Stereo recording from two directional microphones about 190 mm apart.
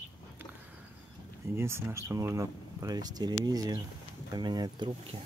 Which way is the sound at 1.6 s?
15° right (ahead or behind).